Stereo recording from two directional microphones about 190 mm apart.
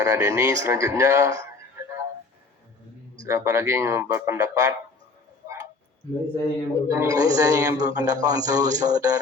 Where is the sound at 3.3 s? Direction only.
15° right (ahead or behind).